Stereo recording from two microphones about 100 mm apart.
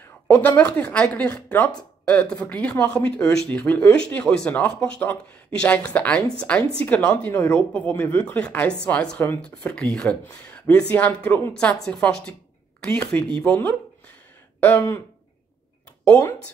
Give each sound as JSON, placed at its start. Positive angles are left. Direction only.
{"t": 0.3, "sound": "speech", "side_deg": 15}
{"t": 11.5, "sound": "speech", "side_deg": 10}
{"t": 14.6, "sound": "a sound", "side_deg": 20}